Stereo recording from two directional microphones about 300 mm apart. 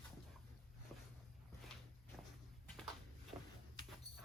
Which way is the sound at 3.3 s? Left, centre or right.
Centre.